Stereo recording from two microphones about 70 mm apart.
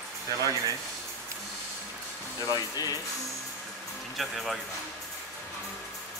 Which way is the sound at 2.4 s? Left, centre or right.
Left.